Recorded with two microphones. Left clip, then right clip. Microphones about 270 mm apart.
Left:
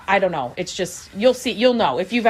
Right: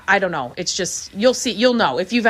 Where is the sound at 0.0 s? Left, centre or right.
Centre.